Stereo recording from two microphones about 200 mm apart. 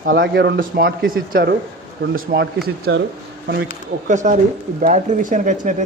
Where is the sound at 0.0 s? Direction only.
60° right (ahead or behind).